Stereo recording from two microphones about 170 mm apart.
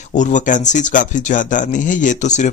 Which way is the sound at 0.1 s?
45° left (ahead or behind).